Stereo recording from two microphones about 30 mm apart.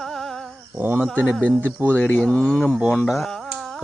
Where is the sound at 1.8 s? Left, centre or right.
Right.